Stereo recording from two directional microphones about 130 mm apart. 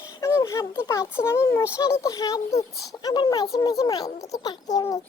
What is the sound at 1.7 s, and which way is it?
A child's voice, 25° left (ahead or behind).